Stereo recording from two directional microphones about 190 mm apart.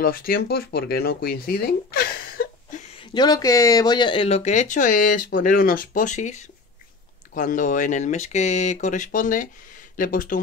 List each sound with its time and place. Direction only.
0.0 s speech: 50° left (ahead or behind)
3.0 s speech: 25° left (ahead or behind); by 10.4 s 45° left (ahead or behind)